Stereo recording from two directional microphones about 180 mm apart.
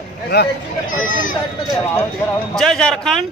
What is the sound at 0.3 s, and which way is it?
Speech, 65° left (ahead or behind).